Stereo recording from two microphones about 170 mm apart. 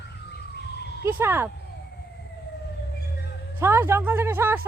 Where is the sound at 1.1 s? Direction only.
15° right (ahead or behind).